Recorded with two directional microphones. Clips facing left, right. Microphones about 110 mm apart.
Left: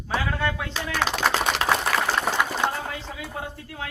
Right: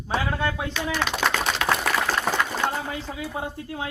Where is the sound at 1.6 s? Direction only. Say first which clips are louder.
Left 1 dB; 15° left (ahead or behind).